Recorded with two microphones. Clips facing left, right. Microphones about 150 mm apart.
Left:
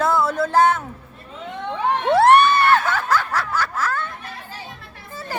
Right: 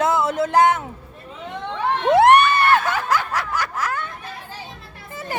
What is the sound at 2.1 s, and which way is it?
Snicker, 15° right (ahead or behind).